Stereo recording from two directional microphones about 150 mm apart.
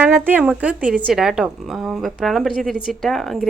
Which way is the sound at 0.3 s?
10° right (ahead or behind).